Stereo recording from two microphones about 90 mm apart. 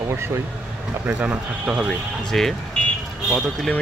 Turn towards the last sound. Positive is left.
turn(degrees=0)  # may be behind; listen again after turning